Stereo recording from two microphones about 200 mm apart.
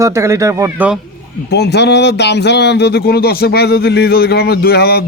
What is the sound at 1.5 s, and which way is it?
Speech, 55° left (ahead or behind).